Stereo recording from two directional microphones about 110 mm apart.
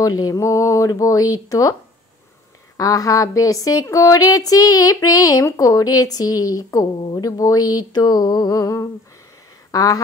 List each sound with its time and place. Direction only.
0.0 s speech: 30° left (ahead or behind)
2.8 s speech: 30° left (ahead or behind)